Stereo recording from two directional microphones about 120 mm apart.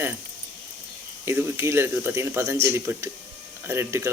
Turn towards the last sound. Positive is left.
turn(degrees=-20)  # may be behind; listen again after turning